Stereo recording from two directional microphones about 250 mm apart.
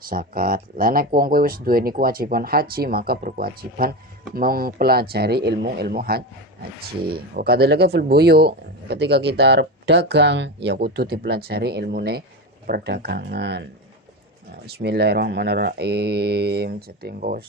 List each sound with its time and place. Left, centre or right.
0.1 s speech: right
14.7 s speech: right